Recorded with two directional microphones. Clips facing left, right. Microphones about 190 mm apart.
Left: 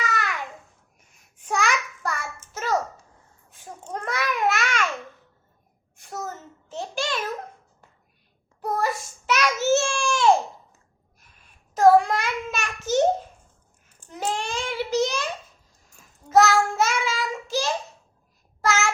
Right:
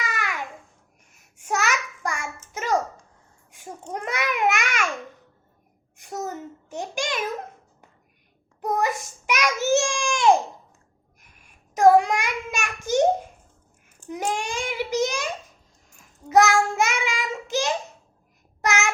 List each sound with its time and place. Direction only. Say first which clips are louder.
0.0 s babbling: left 3 dB; 10° right (ahead or behind)
1.4 s child singing: even; 10° right (ahead or behind)
3.5 s babbling: right 1 dB; 15° right (ahead or behind)
6.0 s a sound: right 3 dB; 15° right (ahead or behind)
8.6 s child singing: right 1 dB; 15° right (ahead or behind)
16.3 s child singing: even; 15° right (ahead or behind)